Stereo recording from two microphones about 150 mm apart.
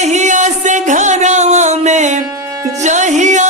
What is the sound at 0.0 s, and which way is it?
Music, 50° right (ahead or behind).